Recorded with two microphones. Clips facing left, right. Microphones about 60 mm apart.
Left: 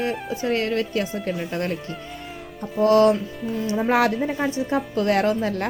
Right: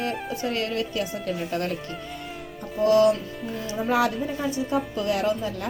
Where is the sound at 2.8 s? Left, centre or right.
Left.